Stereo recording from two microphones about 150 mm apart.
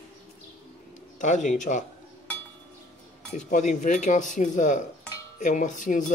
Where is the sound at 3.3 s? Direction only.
55° left (ahead or behind).